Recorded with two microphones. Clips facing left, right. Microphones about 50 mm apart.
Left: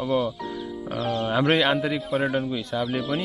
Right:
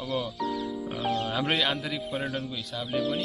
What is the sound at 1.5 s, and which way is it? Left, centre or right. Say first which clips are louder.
Speech: left 6 dB; centre.